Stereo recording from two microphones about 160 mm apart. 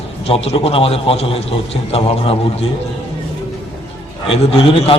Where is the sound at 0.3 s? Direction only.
40° left (ahead or behind).